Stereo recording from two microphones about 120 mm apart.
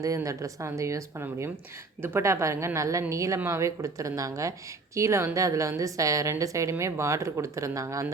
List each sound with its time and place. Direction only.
0.0 s a woman's voice: 30° right (ahead or behind)